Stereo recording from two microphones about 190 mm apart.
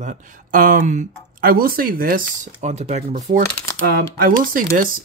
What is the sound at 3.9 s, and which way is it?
Speech, 50° right (ahead or behind).